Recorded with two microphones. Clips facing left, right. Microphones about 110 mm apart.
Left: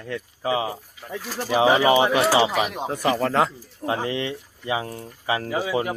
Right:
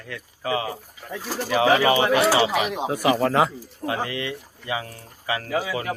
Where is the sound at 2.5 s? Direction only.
Centre (ahead or behind).